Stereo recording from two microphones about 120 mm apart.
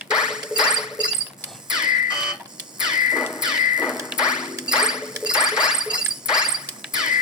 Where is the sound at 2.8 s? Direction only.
5° right (ahead or behind).